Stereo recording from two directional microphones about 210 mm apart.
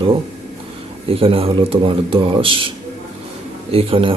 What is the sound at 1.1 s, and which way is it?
Speech, 25° right (ahead or behind).